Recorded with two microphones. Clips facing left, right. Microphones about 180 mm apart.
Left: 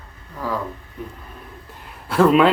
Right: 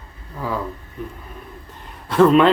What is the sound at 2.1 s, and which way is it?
Speech, 5° left (ahead or behind).